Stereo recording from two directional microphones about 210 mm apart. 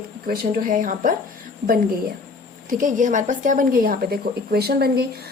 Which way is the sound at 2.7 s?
40° right (ahead or behind).